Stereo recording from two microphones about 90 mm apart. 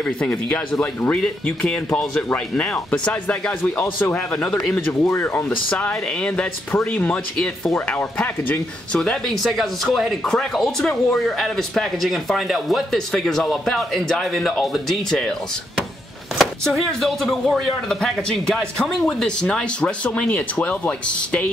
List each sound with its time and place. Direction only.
0.0 s speech: 15° left (ahead or behind)